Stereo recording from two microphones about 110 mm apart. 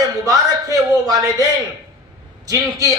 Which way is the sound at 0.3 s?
35° right (ahead or behind).